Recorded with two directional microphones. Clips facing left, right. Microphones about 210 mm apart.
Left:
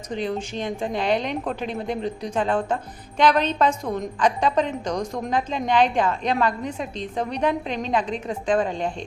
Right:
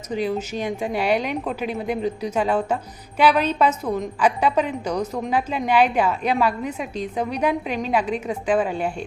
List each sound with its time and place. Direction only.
0.1 s a woman's voice: 10° right (ahead or behind)